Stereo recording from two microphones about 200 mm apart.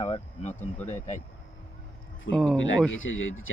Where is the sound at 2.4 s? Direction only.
Centre (ahead or behind).